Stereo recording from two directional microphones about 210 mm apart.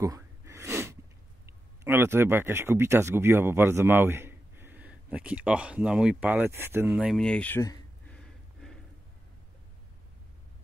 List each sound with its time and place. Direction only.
0.0 s gasp: 15° right (ahead or behind)
1.4 s speech: 10° right (ahead or behind)